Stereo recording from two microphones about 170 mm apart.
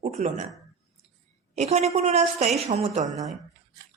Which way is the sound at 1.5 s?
40° right (ahead or behind).